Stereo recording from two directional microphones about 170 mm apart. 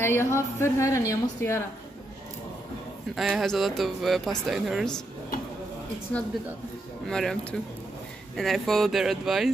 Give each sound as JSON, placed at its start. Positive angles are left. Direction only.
{"t": 0.0, "sound": "a woman's voice", "side_deg": 15}
{"t": 3.2, "sound": "speech", "side_deg": 0}
{"t": 7.1, "sound": "speech", "side_deg": 5}
{"t": 8.4, "sound": "speech", "side_deg": 0}